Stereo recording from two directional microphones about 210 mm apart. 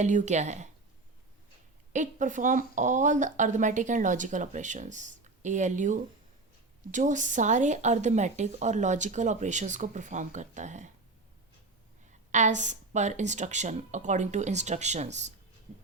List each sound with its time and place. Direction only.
0.0 s a woman's voice: 35° right (ahead or behind)
1.9 s a woman's voice: 35° right (ahead or behind)
12.3 s a woman's voice: 35° right (ahead or behind)